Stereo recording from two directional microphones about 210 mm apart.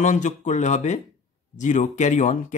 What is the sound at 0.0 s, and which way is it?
Speech, 35° left (ahead or behind).